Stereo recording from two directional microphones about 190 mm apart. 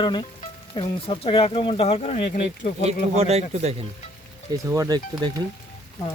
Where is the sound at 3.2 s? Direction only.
35° right (ahead or behind).